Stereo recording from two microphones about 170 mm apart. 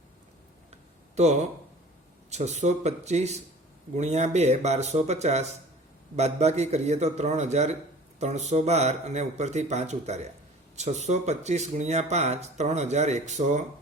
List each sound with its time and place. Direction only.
1.1 s speech: 40° right (ahead or behind)